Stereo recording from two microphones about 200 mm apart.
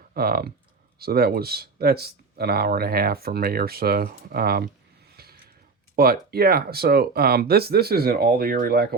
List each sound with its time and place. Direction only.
0.1 s speech: 50° right (ahead or behind)
5.1 s a sound: 50° right (ahead or behind)
6.0 s speech: 50° right (ahead or behind)